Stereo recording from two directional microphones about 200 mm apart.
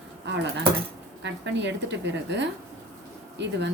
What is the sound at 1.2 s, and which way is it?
A woman's voice, 60° right (ahead or behind).